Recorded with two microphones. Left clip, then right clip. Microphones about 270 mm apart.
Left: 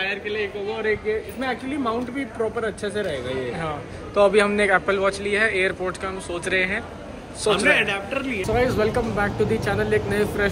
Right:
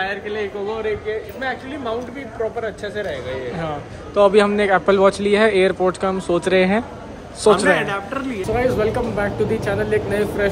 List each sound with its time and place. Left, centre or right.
0.1 s a man's voice: centre
1.0 s speech: left
3.5 s a man's voice: centre